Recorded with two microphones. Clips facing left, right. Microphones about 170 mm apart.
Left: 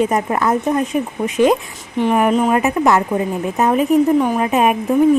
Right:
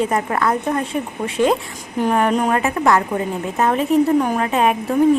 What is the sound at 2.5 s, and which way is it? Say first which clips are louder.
Speech: left 2 dB; 15° left (ahead or behind).